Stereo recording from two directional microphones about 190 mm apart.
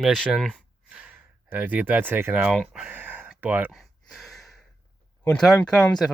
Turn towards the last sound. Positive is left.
turn(degrees=5)  # may be behind; listen again after turning